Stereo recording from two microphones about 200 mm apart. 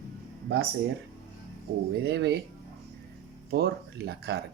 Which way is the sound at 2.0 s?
55° right (ahead or behind).